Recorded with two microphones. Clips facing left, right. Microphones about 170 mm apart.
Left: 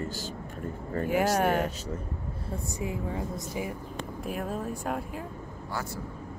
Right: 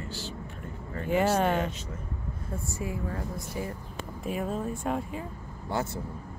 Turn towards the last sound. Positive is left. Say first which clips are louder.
# right 4 dB
turn(degrees=-25)  # may be behind; listen again after turning